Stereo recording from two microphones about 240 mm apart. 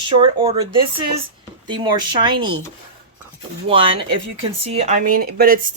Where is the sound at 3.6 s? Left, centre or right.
Right.